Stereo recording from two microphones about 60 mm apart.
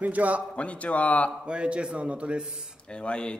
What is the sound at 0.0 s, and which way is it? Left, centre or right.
Speech, right.